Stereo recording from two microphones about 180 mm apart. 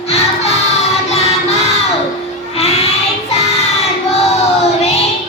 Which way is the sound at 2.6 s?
35° left (ahead or behind).